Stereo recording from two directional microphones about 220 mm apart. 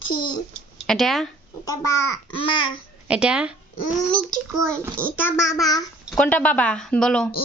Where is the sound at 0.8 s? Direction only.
Centre (ahead or behind).